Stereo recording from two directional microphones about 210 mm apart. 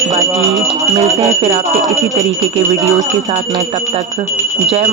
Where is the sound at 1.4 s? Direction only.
30° right (ahead or behind).